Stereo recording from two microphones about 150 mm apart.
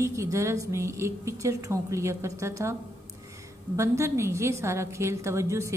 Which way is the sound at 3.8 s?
20° right (ahead or behind).